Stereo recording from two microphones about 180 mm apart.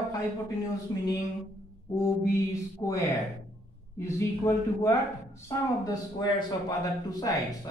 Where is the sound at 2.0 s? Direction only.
15° left (ahead or behind).